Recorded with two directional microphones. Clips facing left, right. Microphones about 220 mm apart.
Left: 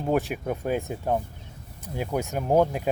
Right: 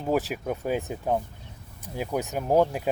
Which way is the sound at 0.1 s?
Centre (ahead or behind).